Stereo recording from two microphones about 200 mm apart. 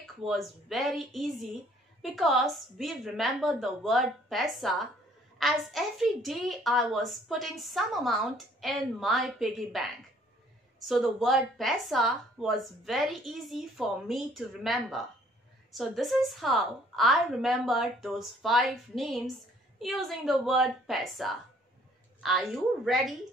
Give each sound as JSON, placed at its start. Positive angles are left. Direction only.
{"t": 0.0, "sound": "a woman's voice", "side_deg": 0}